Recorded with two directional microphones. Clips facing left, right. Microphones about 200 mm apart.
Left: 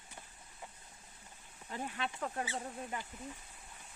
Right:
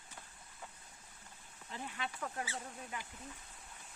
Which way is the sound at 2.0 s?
30° left (ahead or behind).